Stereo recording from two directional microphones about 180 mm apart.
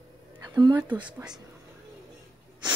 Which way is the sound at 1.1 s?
5° right (ahead or behind).